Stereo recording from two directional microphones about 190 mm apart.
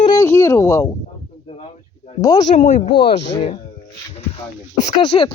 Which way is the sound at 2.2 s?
20° left (ahead or behind).